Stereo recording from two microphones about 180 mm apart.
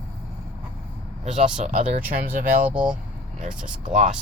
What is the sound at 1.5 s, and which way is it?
Speech, 45° right (ahead or behind).